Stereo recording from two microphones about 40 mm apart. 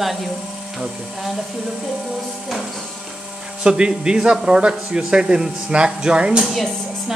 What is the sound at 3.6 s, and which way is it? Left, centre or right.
Speech, right.